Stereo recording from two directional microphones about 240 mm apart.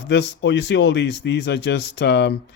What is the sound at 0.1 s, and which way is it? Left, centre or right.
Speech, left.